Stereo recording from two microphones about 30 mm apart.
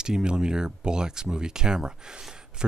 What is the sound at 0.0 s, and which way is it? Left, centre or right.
Speech, right.